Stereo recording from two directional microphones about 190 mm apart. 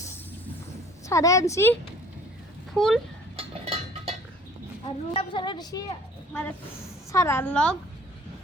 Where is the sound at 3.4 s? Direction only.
35° right (ahead or behind).